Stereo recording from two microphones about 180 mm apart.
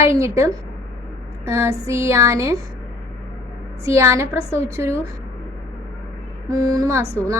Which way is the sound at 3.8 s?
15° right (ahead or behind).